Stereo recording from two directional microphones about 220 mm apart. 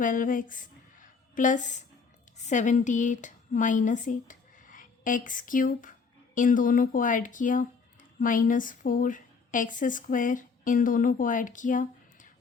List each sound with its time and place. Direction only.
0.0 s a woman's voice: 40° left (ahead or behind)